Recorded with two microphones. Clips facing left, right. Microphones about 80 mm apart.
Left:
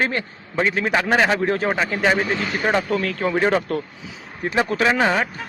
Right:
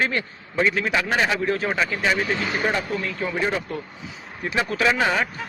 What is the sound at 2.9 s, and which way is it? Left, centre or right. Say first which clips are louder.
Speech: left 5 dB; left.